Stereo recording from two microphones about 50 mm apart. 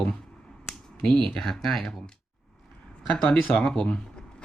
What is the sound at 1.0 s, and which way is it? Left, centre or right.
Speech, centre.